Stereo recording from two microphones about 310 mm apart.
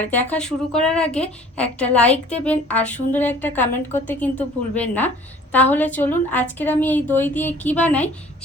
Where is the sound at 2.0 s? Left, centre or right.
Left.